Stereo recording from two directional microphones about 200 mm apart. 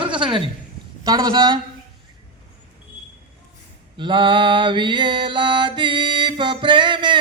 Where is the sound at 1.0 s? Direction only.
20° right (ahead or behind).